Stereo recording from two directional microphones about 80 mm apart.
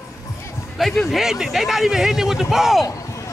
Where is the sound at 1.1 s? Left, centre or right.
Centre.